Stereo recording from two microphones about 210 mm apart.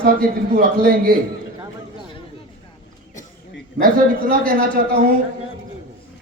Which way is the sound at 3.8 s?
40° right (ahead or behind).